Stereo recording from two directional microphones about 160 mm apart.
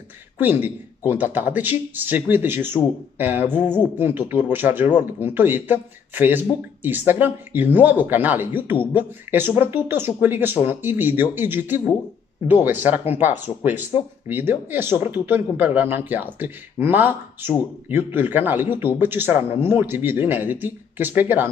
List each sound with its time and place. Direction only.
0.4 s speech: 10° right (ahead or behind)